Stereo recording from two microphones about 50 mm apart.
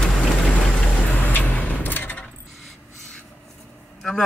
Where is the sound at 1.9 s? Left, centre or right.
Left.